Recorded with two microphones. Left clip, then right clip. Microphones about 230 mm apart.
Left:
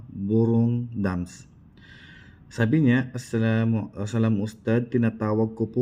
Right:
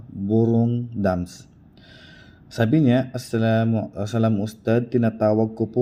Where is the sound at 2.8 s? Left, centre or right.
Right.